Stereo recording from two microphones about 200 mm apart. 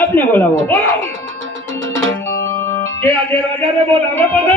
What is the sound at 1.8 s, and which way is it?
Music, 75° right (ahead or behind).